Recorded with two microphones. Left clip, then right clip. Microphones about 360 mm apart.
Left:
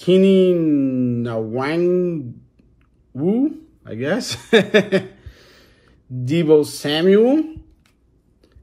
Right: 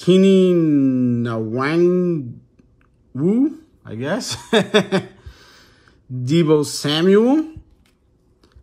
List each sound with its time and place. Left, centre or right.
0.0 s speech: centre